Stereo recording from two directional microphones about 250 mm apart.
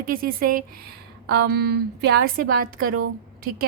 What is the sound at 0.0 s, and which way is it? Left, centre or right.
Speech, right.